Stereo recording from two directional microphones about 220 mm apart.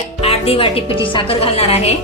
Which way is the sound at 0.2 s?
25° left (ahead or behind).